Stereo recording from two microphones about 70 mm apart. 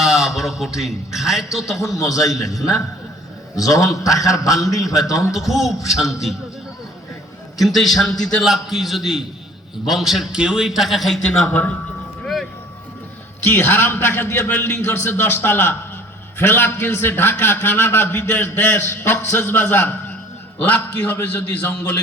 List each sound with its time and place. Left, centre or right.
0.0 s a man's voice: centre
2.0 s a man's voice: left
5.4 s a man's voice: centre
7.6 s a man's voice: centre
8.4 s a man's voice: centre
11.4 s a man's voice: left
13.5 s a man's voice: left